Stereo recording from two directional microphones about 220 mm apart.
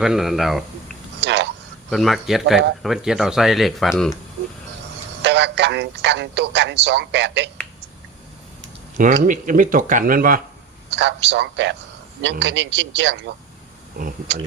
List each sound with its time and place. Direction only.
0.0 s speech: centre (ahead or behind)
1.2 s a sound: 50° right (ahead or behind)
1.9 s speech: centre (ahead or behind)
5.2 s speech: 50° right (ahead or behind)
9.2 s speech: 35° right (ahead or behind)
10.9 s a man's voice: 50° right (ahead or behind)